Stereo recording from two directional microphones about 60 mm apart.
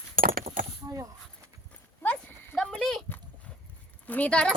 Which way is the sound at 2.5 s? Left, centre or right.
Centre.